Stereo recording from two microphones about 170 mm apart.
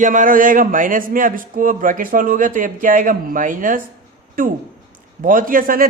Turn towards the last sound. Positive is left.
turn(degrees=-60)  # may be behind; listen again after turning